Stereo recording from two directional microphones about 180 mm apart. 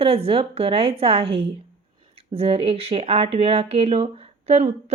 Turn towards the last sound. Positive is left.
turn(degrees=-35)  # may be behind; listen again after turning